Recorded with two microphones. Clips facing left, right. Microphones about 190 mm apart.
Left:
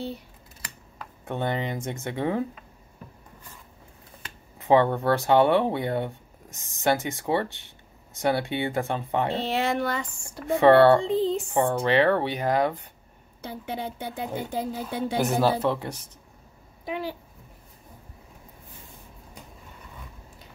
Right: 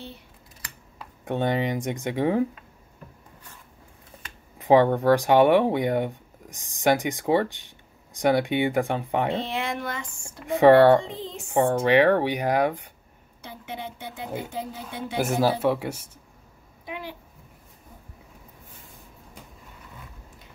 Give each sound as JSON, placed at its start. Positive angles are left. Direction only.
{"t": 0.9, "sound": "speech", "side_deg": -15}
{"t": 4.6, "sound": "speech", "side_deg": -15}
{"t": 9.3, "sound": "a woman's voice", "side_deg": 35}
{"t": 10.4, "sound": "speech", "side_deg": -15}
{"t": 11.0, "sound": "a woman's voice", "side_deg": 35}
{"t": 11.8, "sound": "speech", "side_deg": -15}
{"t": 13.4, "sound": "a woman's voice", "side_deg": 35}
{"t": 15.1, "sound": "speech", "side_deg": -10}